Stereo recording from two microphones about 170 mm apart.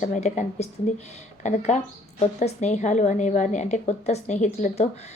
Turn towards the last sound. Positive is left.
turn(degrees=40)  # may be behind; listen again after turning